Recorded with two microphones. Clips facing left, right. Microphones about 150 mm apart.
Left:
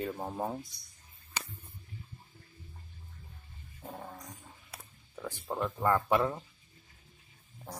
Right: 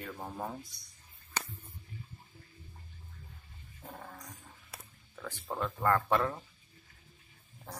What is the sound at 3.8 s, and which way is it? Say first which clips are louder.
Speech: left 3 dB; 15° left (ahead or behind).